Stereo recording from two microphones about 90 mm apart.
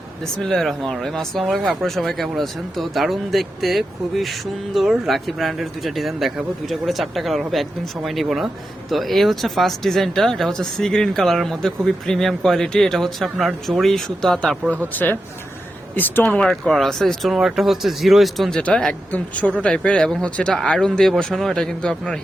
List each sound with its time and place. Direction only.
0.4 s speech: 5° left (ahead or behind)
14.9 s speech: 20° left (ahead or behind)
16.4 s speech: 5° left (ahead or behind)